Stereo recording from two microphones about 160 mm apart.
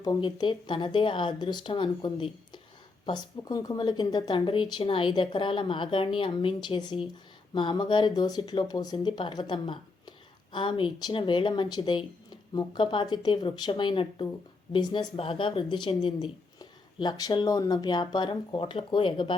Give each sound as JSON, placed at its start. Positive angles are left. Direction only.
{"t": 0.0, "sound": "a woman's voice", "side_deg": 25}